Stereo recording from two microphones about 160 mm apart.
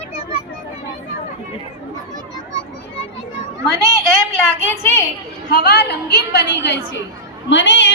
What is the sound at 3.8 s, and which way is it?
Speech, 20° right (ahead or behind).